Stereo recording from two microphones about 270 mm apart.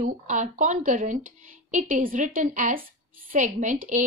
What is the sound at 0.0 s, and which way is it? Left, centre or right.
Speech, right.